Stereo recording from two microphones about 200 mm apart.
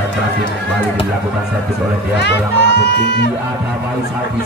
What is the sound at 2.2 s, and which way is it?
Speech, 55° left (ahead or behind).